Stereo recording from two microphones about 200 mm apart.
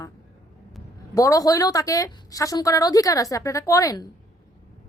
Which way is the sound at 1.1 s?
15° left (ahead or behind).